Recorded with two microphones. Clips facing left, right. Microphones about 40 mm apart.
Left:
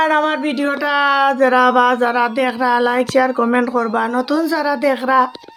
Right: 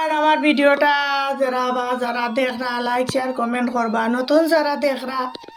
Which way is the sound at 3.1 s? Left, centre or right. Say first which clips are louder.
Left 7 dB; left.